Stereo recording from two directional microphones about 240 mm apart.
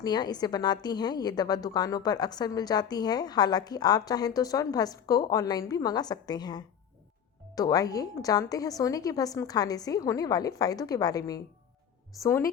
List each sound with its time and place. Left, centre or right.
0.0 s a woman's voice: centre